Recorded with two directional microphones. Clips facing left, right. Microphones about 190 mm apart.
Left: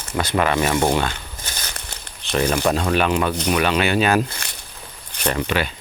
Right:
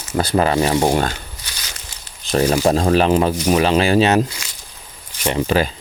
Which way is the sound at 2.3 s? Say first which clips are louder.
Right 4 dB; 35° right (ahead or behind).